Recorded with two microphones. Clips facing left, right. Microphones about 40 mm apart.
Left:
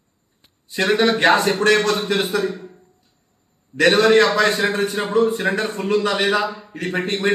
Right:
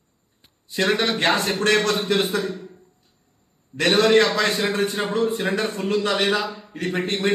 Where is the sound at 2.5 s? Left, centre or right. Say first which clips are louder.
Left 2 dB; left.